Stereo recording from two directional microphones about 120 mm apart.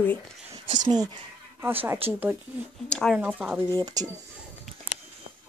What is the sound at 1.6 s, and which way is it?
Speech, 20° right (ahead or behind).